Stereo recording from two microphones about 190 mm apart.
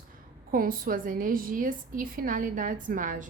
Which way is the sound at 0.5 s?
50° right (ahead or behind).